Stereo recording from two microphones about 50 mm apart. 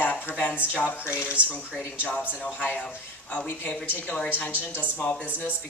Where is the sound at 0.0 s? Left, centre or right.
Left.